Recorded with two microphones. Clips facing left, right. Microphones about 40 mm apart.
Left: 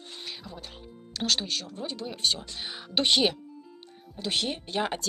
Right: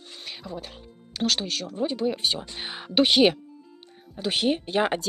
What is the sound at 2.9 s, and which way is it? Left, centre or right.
Speech, centre.